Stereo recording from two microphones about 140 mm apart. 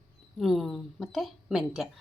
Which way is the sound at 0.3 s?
Centre (ahead or behind).